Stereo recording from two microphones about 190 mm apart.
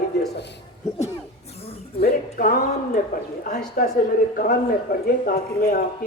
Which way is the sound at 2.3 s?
45° left (ahead or behind).